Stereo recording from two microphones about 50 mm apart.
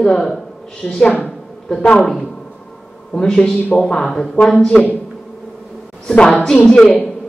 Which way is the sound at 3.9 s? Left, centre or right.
Centre.